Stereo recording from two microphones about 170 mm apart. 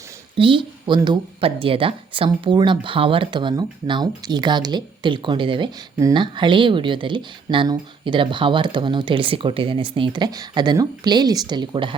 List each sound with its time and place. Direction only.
0.3 s speech: 30° right (ahead or behind)